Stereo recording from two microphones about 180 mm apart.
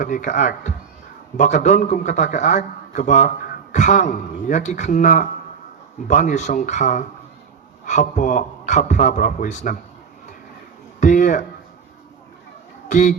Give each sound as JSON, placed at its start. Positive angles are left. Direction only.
{"t": 0.0, "sound": "a man's voice", "side_deg": 45}
{"t": 11.0, "sound": "a sound", "side_deg": 45}
{"t": 12.9, "sound": "speech", "side_deg": 45}